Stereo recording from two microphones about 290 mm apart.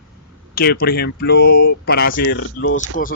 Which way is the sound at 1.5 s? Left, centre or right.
Left.